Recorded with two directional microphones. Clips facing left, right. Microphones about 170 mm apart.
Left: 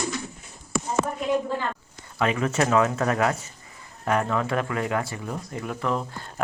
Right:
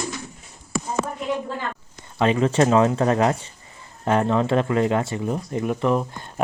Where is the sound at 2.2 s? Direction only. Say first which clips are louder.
Right 5 dB; 30° right (ahead or behind).